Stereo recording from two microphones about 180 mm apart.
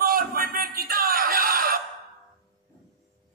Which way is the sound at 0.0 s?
55° right (ahead or behind).